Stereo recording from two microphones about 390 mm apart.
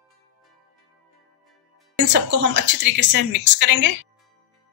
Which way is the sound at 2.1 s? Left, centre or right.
Right.